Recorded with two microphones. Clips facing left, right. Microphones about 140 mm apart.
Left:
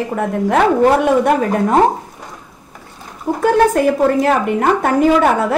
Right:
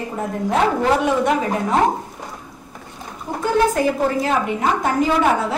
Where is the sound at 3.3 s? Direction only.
55° left (ahead or behind).